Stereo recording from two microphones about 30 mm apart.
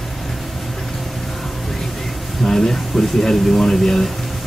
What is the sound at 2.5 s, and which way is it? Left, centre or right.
Speech, centre.